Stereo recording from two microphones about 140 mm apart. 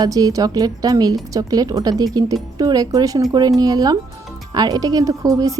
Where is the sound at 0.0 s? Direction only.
25° right (ahead or behind).